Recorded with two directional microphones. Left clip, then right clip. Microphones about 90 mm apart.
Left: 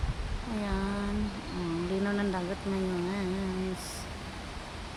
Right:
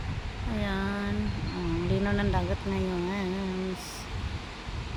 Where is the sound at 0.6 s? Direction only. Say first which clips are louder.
Right 3 dB; 10° right (ahead or behind).